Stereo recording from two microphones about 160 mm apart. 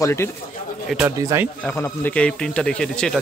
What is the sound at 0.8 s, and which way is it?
Speech, 5° right (ahead or behind).